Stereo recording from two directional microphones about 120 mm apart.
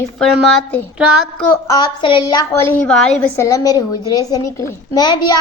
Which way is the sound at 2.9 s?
5° left (ahead or behind).